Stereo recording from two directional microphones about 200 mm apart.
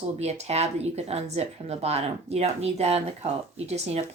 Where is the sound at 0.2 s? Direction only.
30° right (ahead or behind).